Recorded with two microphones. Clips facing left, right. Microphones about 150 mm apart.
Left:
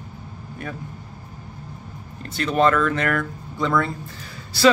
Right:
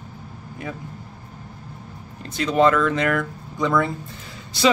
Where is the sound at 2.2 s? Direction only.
20° right (ahead or behind).